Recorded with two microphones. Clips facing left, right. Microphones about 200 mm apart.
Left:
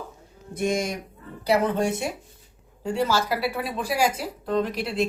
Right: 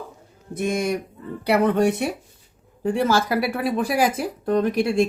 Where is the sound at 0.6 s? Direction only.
55° right (ahead or behind).